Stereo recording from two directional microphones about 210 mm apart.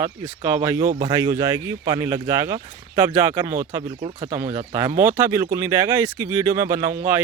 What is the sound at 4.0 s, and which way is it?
Speech, 25° right (ahead or behind).